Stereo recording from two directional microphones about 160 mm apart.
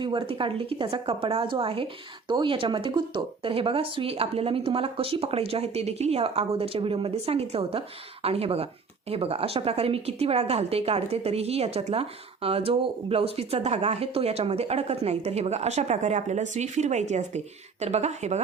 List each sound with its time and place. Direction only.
0.0 s a woman's voice: 30° right (ahead or behind)